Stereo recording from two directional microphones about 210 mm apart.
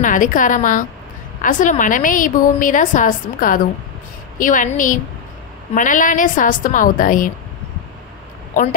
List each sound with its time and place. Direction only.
0.0 s a woman's voice: 40° left (ahead or behind)